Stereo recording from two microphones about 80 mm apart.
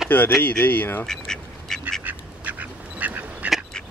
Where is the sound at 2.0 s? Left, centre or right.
Right.